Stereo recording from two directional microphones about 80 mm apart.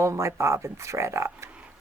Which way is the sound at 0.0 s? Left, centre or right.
Right.